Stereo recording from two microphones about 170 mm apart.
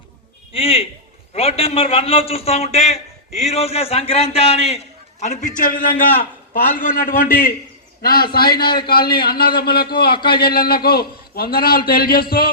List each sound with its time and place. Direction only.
0.5 s a man's voice: 35° left (ahead or behind); by 12.5 s 60° left (ahead or behind)